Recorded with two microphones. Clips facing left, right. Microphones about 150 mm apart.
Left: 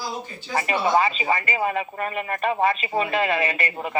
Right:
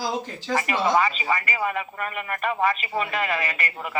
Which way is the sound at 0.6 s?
30° left (ahead or behind).